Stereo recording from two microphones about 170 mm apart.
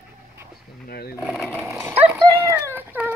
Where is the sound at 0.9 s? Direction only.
65° left (ahead or behind).